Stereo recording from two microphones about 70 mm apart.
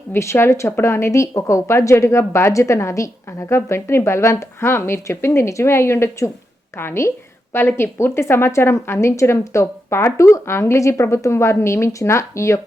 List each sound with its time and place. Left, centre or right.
0.1 s a woman's voice: left